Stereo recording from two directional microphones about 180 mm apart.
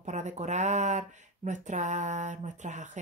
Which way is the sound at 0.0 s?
40° right (ahead or behind).